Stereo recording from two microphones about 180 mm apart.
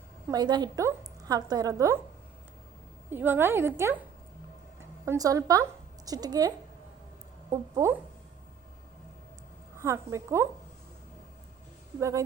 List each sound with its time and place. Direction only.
0.3 s a woman's voice: 20° right (ahead or behind)
3.1 s a woman's voice: 10° right (ahead or behind)
7.5 s a woman's voice: 15° right (ahead or behind)
9.7 s a woman's voice: 15° right (ahead or behind)
11.9 s a woman's voice: 15° right (ahead or behind)